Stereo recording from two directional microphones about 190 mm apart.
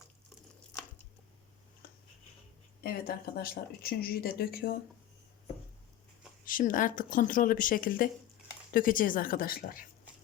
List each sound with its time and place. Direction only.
2.8 s speech: 55° left (ahead or behind)
6.4 s speech: 45° left (ahead or behind)